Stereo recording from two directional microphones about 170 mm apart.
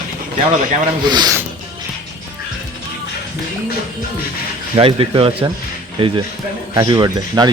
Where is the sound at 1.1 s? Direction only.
20° right (ahead or behind).